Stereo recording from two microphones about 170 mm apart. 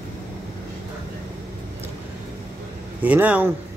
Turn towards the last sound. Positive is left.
turn(degrees=-10)  # may be behind; listen again after turning